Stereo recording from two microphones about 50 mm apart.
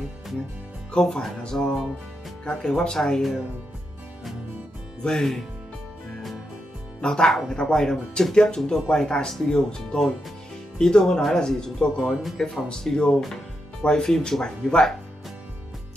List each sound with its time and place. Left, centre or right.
0.9 s speech: centre
5.0 s speech: centre
7.0 s speech: centre
12.0 s speech: centre
12.6 s speech: centre